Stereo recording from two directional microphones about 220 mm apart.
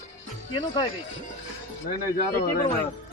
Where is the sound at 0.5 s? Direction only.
20° left (ahead or behind).